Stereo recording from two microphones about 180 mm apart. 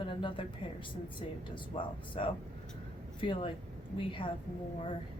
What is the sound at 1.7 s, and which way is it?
A woman's voice, 35° left (ahead or behind).